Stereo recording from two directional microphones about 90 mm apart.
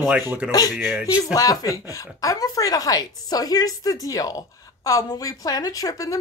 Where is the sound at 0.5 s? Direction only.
45° left (ahead or behind).